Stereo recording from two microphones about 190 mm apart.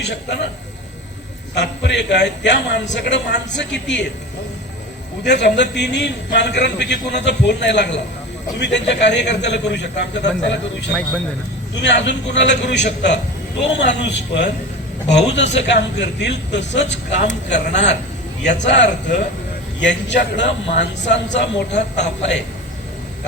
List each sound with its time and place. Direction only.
1.5 s a man's voice: 65° left (ahead or behind)
5.2 s a man's voice: 65° left (ahead or behind)